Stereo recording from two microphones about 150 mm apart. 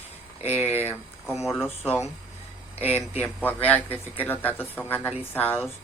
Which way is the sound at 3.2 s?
10° left (ahead or behind).